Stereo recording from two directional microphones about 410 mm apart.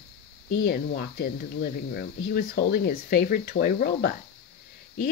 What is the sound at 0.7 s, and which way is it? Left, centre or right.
Speech, left.